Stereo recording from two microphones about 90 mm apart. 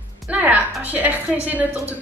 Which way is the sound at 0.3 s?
20° right (ahead or behind).